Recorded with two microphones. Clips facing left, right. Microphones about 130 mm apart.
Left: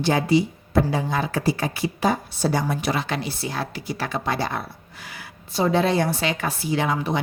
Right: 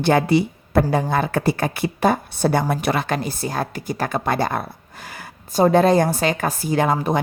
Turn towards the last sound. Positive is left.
turn(degrees=-45)  # may be behind; listen again after turning